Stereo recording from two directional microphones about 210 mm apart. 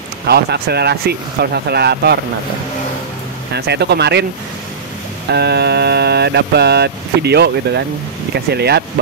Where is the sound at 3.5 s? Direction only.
50° right (ahead or behind).